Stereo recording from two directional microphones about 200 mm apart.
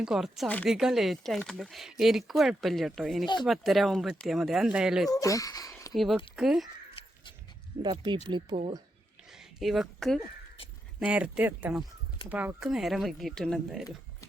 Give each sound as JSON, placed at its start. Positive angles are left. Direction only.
{"t": 0.0, "sound": "speech", "side_deg": 0}
{"t": 5.0, "sound": "speech", "side_deg": 15}
{"t": 5.9, "sound": "speech", "side_deg": 0}
{"t": 7.0, "sound": "a sound", "side_deg": 25}
{"t": 7.8, "sound": "speech", "side_deg": -20}
{"t": 9.3, "sound": "speech", "side_deg": 0}